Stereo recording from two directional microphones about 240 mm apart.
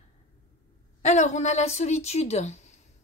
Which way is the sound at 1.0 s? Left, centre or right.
Left.